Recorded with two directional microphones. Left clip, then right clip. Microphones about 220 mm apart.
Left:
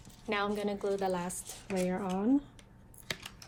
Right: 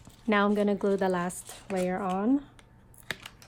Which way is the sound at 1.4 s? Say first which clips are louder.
Right 4 dB; 15° right (ahead or behind).